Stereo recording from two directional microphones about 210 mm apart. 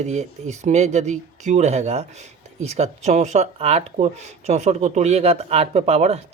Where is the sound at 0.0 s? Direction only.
35° right (ahead or behind).